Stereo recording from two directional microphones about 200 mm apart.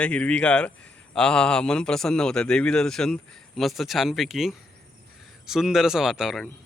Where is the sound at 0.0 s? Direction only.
5° left (ahead or behind).